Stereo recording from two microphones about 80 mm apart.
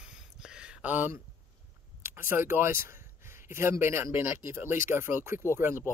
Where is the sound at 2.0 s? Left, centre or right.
Right.